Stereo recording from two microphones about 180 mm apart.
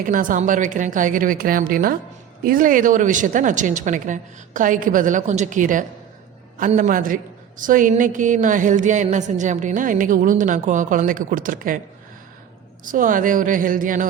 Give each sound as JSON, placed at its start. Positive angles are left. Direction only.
{"t": 0.0, "sound": "a woman's voice", "side_deg": -50}
{"t": 12.8, "sound": "a woman's voice", "side_deg": -45}